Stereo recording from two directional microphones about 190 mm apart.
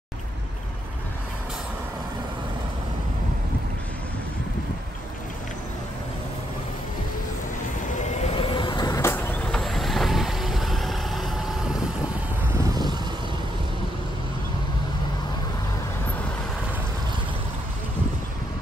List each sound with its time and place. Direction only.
8.0 s vehicle: 35° left (ahead or behind); by 11.7 s centre (ahead or behind)
12.5 s vehicle: 20° right (ahead or behind)